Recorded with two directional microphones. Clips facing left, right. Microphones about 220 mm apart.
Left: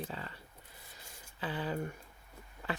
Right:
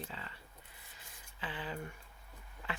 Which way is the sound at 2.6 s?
40° left (ahead or behind).